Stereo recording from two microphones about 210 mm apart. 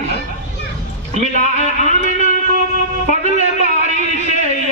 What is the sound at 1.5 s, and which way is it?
Music, 35° left (ahead or behind).